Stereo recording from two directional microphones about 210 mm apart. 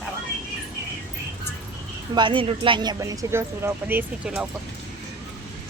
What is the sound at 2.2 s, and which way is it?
Speech, 25° right (ahead or behind).